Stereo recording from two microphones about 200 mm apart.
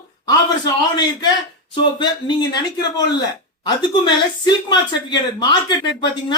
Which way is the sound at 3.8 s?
20° left (ahead or behind).